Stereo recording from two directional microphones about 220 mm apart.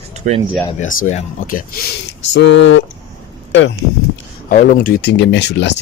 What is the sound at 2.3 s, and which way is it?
Speech, 55° left (ahead or behind).